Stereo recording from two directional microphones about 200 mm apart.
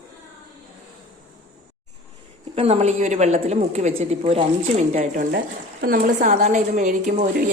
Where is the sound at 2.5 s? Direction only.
30° right (ahead or behind).